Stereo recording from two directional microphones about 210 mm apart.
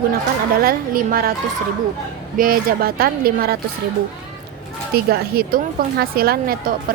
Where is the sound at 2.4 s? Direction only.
45° right (ahead or behind).